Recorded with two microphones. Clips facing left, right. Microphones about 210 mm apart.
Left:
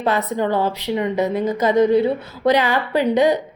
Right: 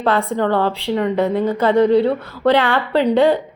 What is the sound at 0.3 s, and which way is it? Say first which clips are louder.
A woman's voice: right 2 dB; 15° left (ahead or behind).